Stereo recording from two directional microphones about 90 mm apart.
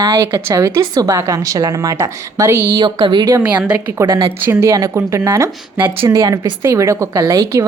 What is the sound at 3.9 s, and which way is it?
A woman's voice, 30° right (ahead or behind).